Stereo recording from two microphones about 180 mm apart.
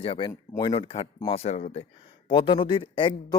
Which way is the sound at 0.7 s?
30° left (ahead or behind).